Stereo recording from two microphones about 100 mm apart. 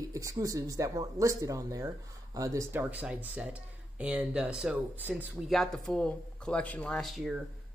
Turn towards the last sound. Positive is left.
turn(degrees=0)  # may be behind; listen again after turning